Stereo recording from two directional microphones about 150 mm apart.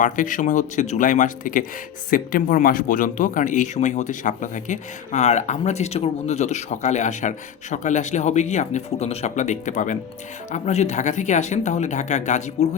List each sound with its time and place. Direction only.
0.0 s speech: 60° left (ahead or behind)